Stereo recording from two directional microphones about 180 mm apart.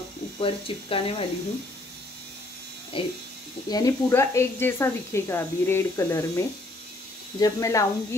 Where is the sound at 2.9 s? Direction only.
30° left (ahead or behind).